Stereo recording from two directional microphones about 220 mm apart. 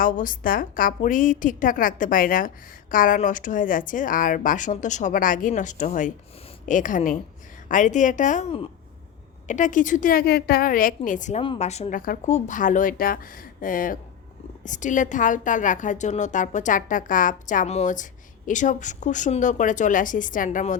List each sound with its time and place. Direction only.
0.0 s a woman's voice: 40° left (ahead or behind)